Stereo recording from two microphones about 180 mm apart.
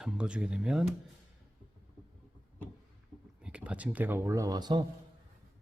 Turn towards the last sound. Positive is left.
turn(degrees=-20)  # may be behind; listen again after turning